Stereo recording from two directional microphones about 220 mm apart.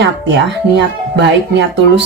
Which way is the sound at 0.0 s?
50° right (ahead or behind).